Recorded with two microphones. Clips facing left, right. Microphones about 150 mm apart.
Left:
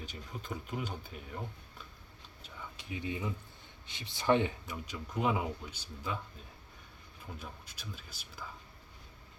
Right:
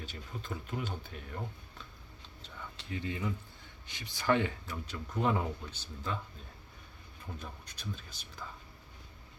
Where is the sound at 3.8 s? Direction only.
25° left (ahead or behind).